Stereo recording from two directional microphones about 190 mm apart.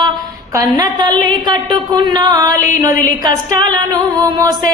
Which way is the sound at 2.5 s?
45° left (ahead or behind).